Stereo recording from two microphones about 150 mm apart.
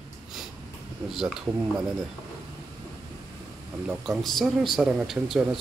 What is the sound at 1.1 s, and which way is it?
Speech, centre (ahead or behind).